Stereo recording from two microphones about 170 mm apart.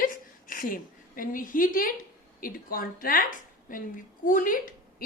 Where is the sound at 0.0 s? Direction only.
55° left (ahead or behind).